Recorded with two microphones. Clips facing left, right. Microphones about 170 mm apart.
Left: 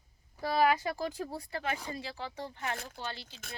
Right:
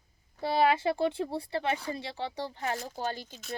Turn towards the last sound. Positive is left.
turn(degrees=-45)  # may be behind; listen again after turning